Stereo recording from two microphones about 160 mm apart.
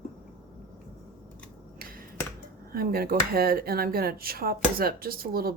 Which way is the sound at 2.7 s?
70° right (ahead or behind).